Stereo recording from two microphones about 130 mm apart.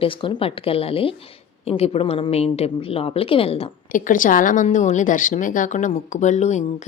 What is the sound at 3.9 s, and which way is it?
A woman's voice, 90° left.